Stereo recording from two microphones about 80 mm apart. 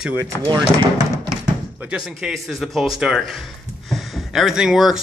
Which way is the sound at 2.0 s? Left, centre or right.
Centre.